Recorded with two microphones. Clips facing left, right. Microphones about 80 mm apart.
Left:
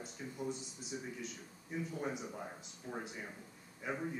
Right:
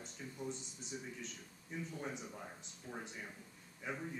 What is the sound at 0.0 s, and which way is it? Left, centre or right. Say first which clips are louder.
A man's voice: left 3 dB; centre.